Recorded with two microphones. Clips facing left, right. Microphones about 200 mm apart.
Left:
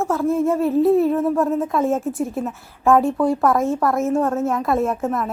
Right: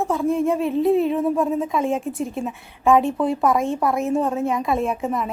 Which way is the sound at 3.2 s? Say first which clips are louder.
Left 2 dB; 20° right (ahead or behind).